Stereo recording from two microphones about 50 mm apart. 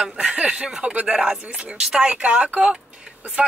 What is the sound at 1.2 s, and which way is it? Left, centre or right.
Speech, centre.